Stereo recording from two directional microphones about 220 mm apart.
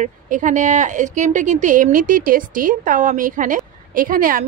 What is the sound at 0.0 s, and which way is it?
Speech, 35° right (ahead or behind).